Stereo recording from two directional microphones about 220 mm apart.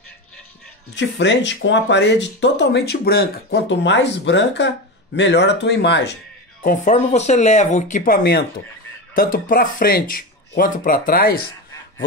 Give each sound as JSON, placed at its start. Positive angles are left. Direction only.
{"t": 0.9, "sound": "speech", "side_deg": 55}
{"t": 6.6, "sound": "speech", "side_deg": 35}